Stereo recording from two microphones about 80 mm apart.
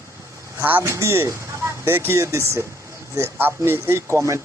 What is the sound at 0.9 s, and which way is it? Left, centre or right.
Speech, right.